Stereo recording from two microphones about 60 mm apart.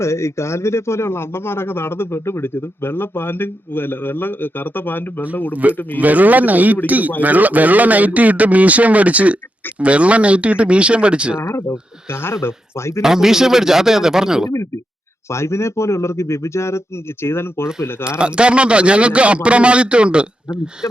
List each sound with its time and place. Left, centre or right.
0.0 s speech: left
5.6 s a man's voice: right
11.3 s speech: left
12.1 s speech: left
13.0 s speech: centre
15.3 s speech: left
18.2 s a man's voice: centre
20.8 s speech: left